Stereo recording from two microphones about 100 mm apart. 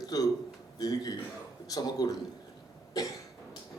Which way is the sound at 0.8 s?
40° left (ahead or behind).